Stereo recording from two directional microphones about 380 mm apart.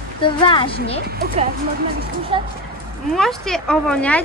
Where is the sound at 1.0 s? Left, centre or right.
Right.